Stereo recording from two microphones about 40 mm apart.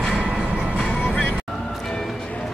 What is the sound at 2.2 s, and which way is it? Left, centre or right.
Music, left.